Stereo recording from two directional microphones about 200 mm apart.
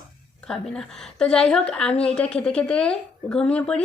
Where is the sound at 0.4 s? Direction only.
5° left (ahead or behind).